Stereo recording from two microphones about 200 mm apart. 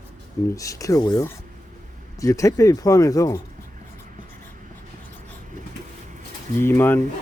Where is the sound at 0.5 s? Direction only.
15° left (ahead or behind).